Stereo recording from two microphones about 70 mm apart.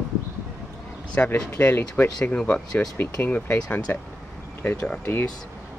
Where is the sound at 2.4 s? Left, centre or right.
Centre.